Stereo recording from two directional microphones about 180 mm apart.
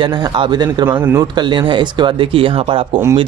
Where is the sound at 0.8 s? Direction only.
10° right (ahead or behind).